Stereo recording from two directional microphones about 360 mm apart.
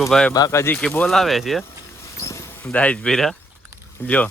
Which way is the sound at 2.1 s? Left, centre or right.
Centre.